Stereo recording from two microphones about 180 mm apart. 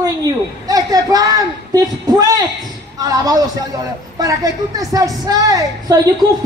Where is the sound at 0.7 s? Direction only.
20° right (ahead or behind).